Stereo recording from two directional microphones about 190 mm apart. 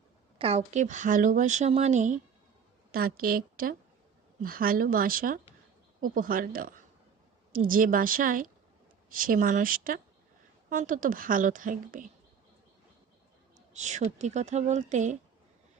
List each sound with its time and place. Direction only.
0.3 s speech: 30° right (ahead or behind)
2.9 s a woman's voice: 50° right (ahead or behind)
13.7 s speech: 40° right (ahead or behind)